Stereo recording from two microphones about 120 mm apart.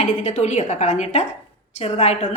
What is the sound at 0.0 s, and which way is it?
A woman's voice, 70° left (ahead or behind).